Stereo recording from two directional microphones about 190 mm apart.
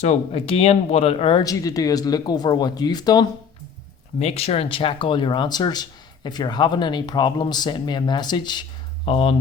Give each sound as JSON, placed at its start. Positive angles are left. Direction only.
{"t": 0.0, "sound": "speech", "side_deg": 35}
{"t": 4.2, "sound": "speech", "side_deg": 30}